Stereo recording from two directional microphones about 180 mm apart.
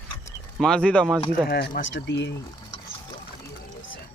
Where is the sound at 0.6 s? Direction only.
5° left (ahead or behind).